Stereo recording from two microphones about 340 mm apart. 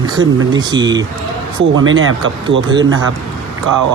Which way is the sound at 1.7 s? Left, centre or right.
Right.